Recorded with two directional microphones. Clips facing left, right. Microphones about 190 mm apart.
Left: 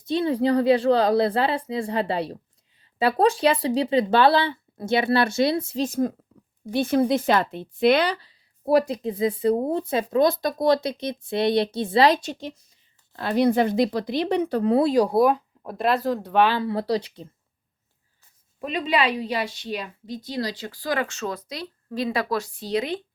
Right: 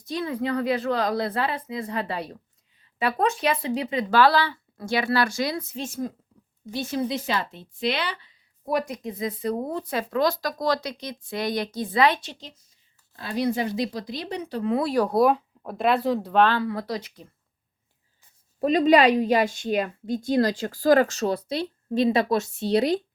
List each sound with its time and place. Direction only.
0.0 s a woman's voice: 25° left (ahead or behind)
6.7 s a woman's voice: 55° left (ahead or behind)
13.1 s speech: 60° left (ahead or behind)
14.6 s a woman's voice: 35° left (ahead or behind)
14.8 s speech: 15° left (ahead or behind)
15.1 s speech: centre (ahead or behind)
16.6 s a woman's voice: 30° left (ahead or behind)
18.6 s a woman's voice: 40° right (ahead or behind)